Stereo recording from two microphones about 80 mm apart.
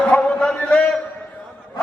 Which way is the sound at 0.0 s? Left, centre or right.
Centre.